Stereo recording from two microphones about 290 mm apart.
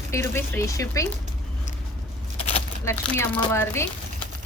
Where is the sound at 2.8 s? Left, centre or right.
Centre.